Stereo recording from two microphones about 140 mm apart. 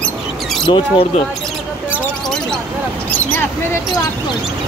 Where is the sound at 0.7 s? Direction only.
40° left (ahead or behind).